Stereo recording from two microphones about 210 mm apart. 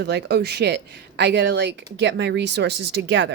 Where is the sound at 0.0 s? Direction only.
50° right (ahead or behind).